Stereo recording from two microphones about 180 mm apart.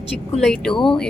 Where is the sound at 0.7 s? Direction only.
25° left (ahead or behind).